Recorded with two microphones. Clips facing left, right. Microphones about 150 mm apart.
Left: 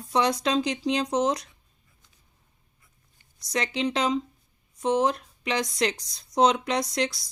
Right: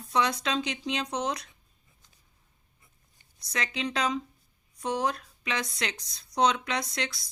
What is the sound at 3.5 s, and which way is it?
Speech, 30° left (ahead or behind).